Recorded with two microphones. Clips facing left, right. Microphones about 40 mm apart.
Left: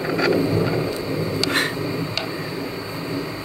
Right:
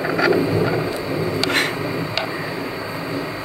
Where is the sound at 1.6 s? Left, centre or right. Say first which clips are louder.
Right 2 dB; right.